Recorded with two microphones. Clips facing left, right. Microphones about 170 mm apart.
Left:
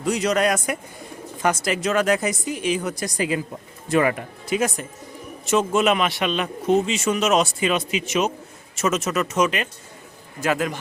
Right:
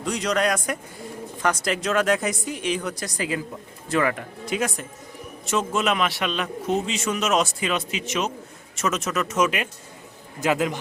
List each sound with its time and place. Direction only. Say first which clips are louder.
0.0 s a man's voice: left 3 dB; 5° left (ahead or behind)
3.0 s a woman's voice: left 4 dB; 20° left (ahead or behind)
4.4 s a man's voice: left 3 dB; centre (ahead or behind)
10.4 s a man's voice: even; 15° right (ahead or behind)